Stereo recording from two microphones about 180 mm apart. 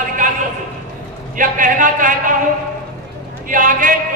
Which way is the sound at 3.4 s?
50° right (ahead or behind).